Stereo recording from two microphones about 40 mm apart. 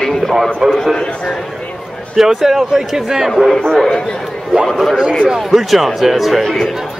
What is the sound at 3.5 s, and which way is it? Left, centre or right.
Speech, centre.